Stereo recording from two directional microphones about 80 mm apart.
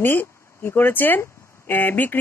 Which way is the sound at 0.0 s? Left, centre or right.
Left.